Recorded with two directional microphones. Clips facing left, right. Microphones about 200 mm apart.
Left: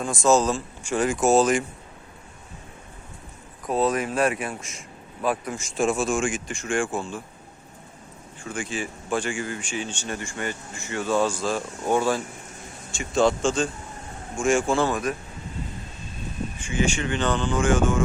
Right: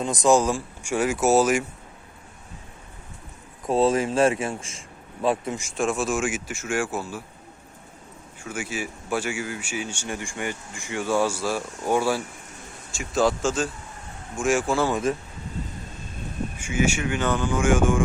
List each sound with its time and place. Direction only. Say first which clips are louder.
0.0 s speech: right 1 dB; 20° right (ahead or behind)
3.7 s speech: right 3 dB; 25° right (ahead or behind)
5.7 s speech: left 2 dB; centre (ahead or behind)
8.4 s speech: left 1 dB; 5° right (ahead or behind)
16.6 s speech: right 1 dB; 10° right (ahead or behind)